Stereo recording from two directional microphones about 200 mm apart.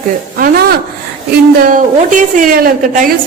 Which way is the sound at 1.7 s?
40° right (ahead or behind).